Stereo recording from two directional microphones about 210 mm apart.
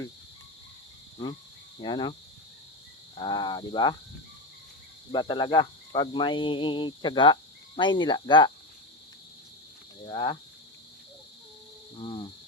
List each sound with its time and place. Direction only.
1.8 s speech: 20° left (ahead or behind)
3.2 s speech: 20° left (ahead or behind)
5.1 s speech: 20° left (ahead or behind)
10.1 s speech: 20° left (ahead or behind)
11.9 s speech: 25° left (ahead or behind)